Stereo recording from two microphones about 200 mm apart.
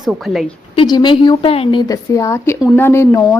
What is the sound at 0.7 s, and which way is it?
A woman's voice, 20° left (ahead or behind).